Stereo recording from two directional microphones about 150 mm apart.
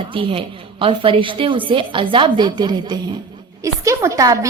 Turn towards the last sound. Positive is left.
turn(degrees=-20)  # may be behind; listen again after turning